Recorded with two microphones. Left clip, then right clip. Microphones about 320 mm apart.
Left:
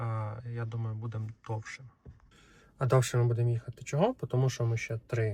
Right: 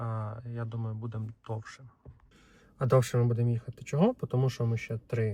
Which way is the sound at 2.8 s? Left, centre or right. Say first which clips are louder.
Right 2 dB; centre.